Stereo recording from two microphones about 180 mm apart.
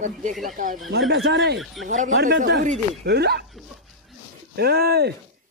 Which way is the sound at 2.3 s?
85° right.